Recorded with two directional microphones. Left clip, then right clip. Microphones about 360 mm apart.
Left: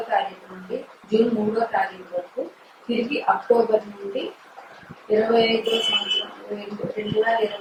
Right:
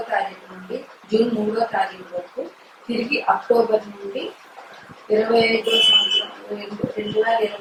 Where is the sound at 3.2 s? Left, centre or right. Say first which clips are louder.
Right 1 dB; centre.